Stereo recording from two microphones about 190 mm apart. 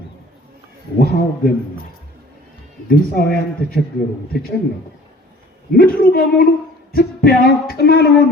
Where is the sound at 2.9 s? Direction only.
55° left (ahead or behind).